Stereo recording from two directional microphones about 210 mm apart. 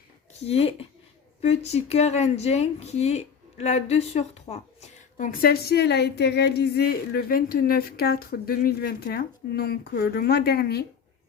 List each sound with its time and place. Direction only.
0.4 s speech: 30° left (ahead or behind); by 10.8 s 50° left (ahead or behind)